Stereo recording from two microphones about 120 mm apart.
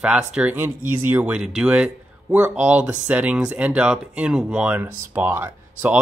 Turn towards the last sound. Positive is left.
turn(degrees=-15)  # may be behind; listen again after turning